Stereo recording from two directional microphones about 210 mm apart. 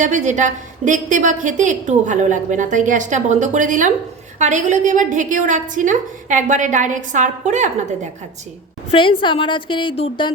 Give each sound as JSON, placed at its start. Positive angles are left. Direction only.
{"t": 0.0, "sound": "a woman's voice", "side_deg": -35}
{"t": 8.9, "sound": "a woman's voice", "side_deg": 25}